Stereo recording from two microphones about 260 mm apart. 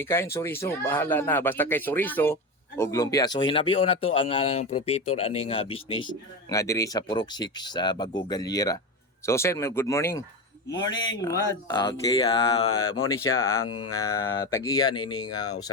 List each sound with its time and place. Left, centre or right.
0.0 s speech: centre
12.7 s speech: left
13.7 s a sound: left
14.1 s speech: centre